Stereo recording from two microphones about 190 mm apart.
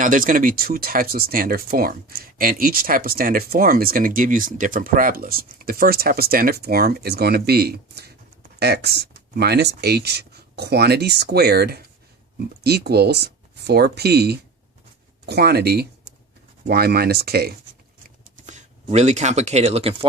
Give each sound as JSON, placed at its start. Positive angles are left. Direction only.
{"t": 0.0, "sound": "speech", "side_deg": -45}
{"t": 18.4, "sound": "speech", "side_deg": -35}